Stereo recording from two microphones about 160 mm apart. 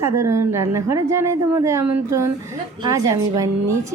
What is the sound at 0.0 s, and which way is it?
A woman's voice, 15° right (ahead or behind).